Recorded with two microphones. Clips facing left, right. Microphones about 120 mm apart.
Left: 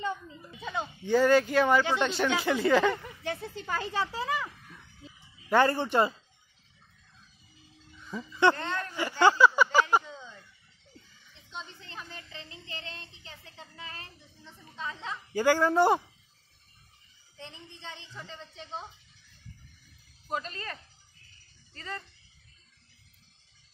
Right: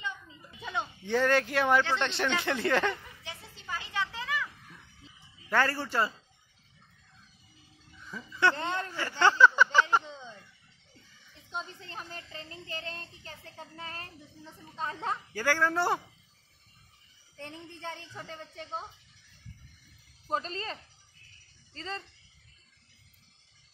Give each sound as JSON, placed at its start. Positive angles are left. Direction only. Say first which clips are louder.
{"t": 0.6, "sound": "speech", "louder": "left 1 dB", "side_deg": 0}
{"t": 2.9, "sound": "speech", "louder": "left 6 dB", "side_deg": 55}
{"t": 3.9, "sound": "a child's voice", "louder": "left 1 dB", "side_deg": 35}
{"t": 5.5, "sound": "speech", "louder": "left 5 dB", "side_deg": 20}
{"t": 8.1, "sound": "speech", "louder": "left 4 dB", "side_deg": 20}
{"t": 8.5, "sound": "speech", "louder": "right 1 dB", "side_deg": -20}
{"t": 8.9, "sound": "a sound", "louder": "left 3 dB", "side_deg": 15}
{"t": 11.5, "sound": "speech", "louder": "right 3 dB", "side_deg": -40}
{"t": 15.3, "sound": "speech", "louder": "left 6 dB", "side_deg": 15}
{"t": 17.4, "sound": "a woman's voice", "louder": "right 4 dB", "side_deg": -50}
{"t": 20.2, "sound": "speech", "louder": "right 2 dB", "side_deg": -30}